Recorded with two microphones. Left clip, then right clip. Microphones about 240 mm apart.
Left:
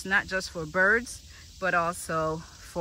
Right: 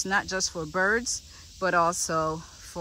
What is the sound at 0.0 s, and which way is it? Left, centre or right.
Speech, centre.